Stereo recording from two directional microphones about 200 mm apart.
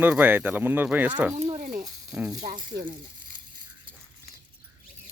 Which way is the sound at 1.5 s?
40° right (ahead or behind).